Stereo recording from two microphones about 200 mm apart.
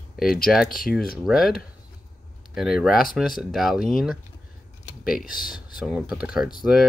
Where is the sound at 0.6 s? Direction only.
45° left (ahead or behind).